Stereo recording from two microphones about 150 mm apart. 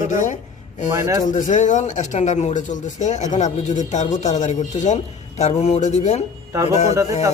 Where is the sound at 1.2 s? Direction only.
60° left (ahead or behind).